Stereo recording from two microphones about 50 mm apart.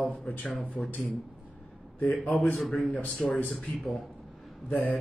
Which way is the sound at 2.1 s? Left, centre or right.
Left.